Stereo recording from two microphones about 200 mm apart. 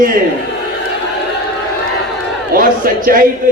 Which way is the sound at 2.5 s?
45° right (ahead or behind).